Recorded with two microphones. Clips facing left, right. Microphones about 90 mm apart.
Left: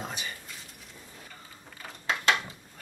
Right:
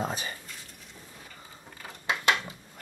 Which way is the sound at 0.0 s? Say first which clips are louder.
Right 5 dB; 35° right (ahead or behind).